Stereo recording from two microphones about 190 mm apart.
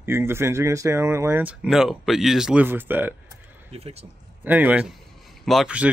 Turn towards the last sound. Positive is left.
turn(degrees=-5)  # may be behind; listen again after turning